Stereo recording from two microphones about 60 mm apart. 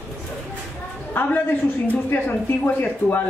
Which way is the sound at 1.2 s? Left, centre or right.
Left.